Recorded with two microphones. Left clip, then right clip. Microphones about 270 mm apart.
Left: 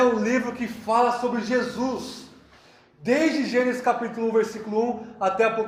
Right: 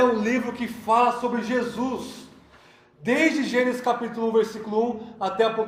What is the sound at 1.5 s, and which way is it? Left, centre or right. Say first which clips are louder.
Speech: left 1 dB; right.